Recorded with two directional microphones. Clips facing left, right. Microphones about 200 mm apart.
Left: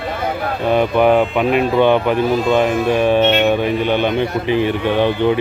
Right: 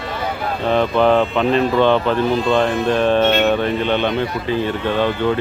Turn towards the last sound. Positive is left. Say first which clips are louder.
# left 3 dB
turn(degrees=15)  # may be behind; listen again after turning